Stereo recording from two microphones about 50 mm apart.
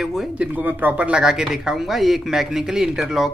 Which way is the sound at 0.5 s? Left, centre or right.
Right.